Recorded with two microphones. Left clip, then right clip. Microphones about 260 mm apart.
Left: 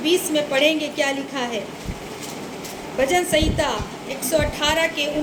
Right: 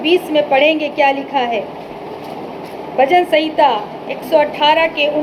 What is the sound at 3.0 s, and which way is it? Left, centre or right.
A woman's voice, left.